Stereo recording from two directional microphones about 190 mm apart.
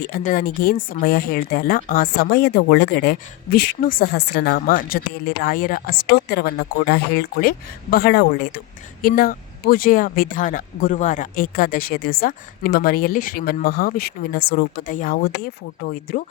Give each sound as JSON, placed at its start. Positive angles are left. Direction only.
{"t": 0.0, "sound": "speech", "side_deg": 50}
{"t": 4.1, "sound": "speech", "side_deg": 65}